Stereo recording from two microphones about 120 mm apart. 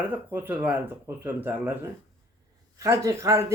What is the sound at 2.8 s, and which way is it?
Speech, 25° right (ahead or behind).